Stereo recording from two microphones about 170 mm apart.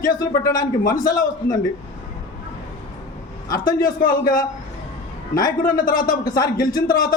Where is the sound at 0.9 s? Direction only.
55° left (ahead or behind).